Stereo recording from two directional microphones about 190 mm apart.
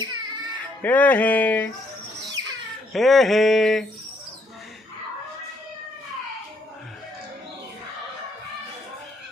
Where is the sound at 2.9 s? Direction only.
Centre (ahead or behind).